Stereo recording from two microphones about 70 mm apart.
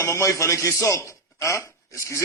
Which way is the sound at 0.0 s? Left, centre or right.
Left.